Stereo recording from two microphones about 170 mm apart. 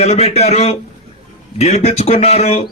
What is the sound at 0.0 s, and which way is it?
A man's voice, 40° left (ahead or behind).